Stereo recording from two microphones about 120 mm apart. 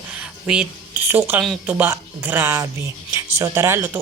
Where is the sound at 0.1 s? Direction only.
5° right (ahead or behind).